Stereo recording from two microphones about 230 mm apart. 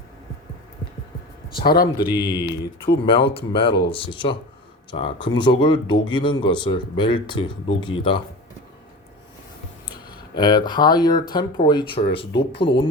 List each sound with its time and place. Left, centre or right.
1.5 s speech: left
2.0 s speech: centre
10.3 s speech: centre